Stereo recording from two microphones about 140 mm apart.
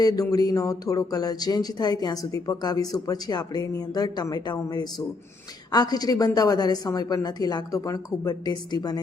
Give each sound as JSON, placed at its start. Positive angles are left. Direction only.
{"t": 0.0, "sound": "speech", "side_deg": 25}